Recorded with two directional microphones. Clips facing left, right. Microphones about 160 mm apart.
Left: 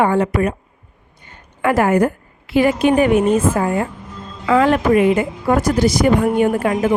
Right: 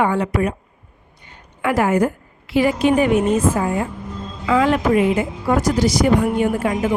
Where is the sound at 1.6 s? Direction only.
50° left (ahead or behind).